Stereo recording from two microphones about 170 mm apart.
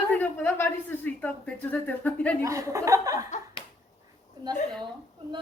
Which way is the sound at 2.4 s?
20° right (ahead or behind).